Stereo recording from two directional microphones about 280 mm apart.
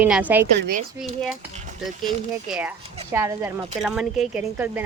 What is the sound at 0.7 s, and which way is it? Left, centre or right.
Speech, right.